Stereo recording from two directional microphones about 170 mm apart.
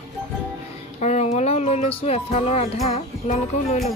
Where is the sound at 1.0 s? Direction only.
40° left (ahead or behind).